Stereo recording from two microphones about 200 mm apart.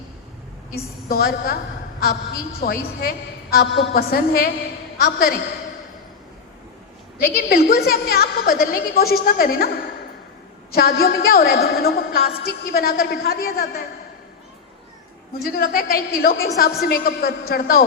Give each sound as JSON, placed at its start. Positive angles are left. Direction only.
{"t": 1.0, "sound": "a woman's voice", "side_deg": 50}
{"t": 7.3, "sound": "a woman's voice", "side_deg": 50}
{"t": 10.7, "sound": "a woman's voice", "side_deg": 50}
{"t": 15.3, "sound": "a woman's voice", "side_deg": 50}